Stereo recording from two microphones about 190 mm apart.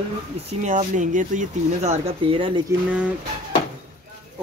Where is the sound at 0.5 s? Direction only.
40° right (ahead or behind).